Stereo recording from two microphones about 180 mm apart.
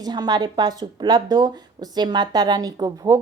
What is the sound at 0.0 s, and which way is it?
Speech, 20° right (ahead or behind).